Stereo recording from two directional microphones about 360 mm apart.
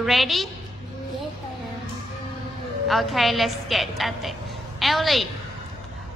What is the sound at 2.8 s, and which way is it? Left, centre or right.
A woman's voice, centre.